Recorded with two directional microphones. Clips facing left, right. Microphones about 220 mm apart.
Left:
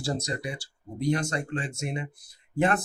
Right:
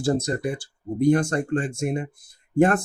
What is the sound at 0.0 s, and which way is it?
Speech, 50° right (ahead or behind).